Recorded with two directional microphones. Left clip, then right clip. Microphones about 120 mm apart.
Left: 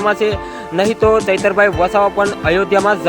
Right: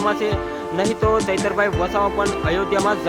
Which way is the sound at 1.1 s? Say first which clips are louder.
Left 7 dB; 45° left (ahead or behind).